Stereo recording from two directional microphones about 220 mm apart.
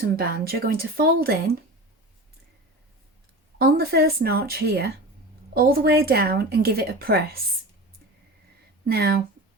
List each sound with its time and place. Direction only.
0.2 s speech: 40° right (ahead or behind)
3.6 s speech: 45° right (ahead or behind)
8.9 s speech: 45° right (ahead or behind)